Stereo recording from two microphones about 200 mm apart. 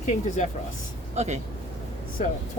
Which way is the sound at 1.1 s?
35° right (ahead or behind).